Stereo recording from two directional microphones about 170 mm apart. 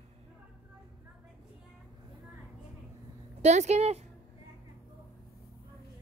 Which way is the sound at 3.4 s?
40° right (ahead or behind).